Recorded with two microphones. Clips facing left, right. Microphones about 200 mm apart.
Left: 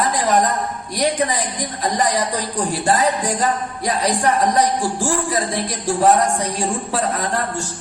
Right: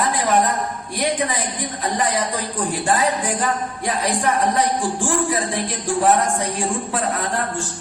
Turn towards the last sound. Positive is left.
turn(degrees=40)  # may be behind; listen again after turning